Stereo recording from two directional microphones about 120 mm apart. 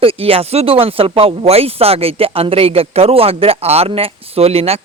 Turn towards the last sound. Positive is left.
turn(degrees=-55)  # may be behind; listen again after turning